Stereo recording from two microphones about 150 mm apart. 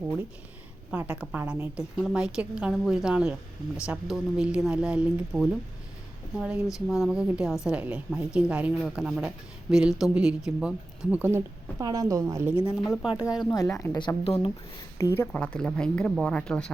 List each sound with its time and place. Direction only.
0.9 s a woman's voice: 5° right (ahead or behind)
12.8 s speech: centre (ahead or behind)
13.7 s speech: 20° left (ahead or behind)
15.3 s speech: 5° left (ahead or behind)